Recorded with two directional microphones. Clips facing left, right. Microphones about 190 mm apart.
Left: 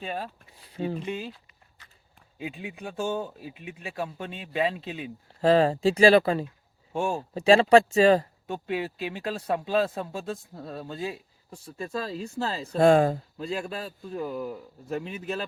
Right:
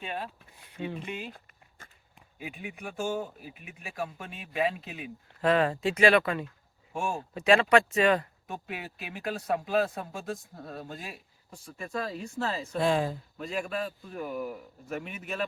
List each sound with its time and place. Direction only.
0.0 s a man's voice: 35° left (ahead or behind)
1.3 s a sound: 50° right (ahead or behind)
2.4 s speech: 25° left (ahead or behind)
12.8 s speech: 50° left (ahead or behind)
13.3 s a man's voice: 30° left (ahead or behind)